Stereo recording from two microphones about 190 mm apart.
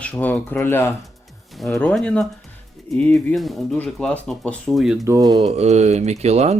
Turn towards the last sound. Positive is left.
turn(degrees=-35)  # may be behind; listen again after turning